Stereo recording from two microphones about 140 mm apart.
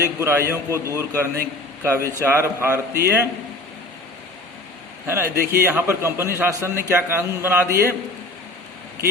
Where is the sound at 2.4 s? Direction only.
20° right (ahead or behind).